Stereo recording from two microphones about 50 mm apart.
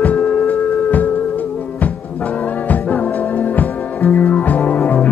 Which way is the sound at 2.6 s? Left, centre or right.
Left.